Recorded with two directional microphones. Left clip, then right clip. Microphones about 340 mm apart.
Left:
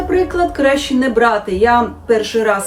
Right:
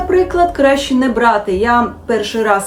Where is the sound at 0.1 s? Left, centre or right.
Centre.